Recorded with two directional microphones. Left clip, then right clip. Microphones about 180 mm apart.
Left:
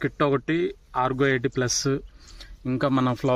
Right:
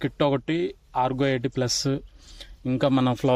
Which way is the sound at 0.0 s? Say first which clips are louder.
Even; 40° right (ahead or behind).